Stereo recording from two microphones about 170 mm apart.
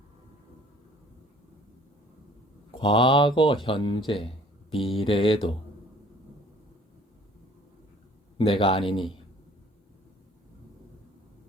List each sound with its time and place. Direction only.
2.7 s a man's voice: 30° left (ahead or behind)
8.4 s a man's voice: 30° left (ahead or behind)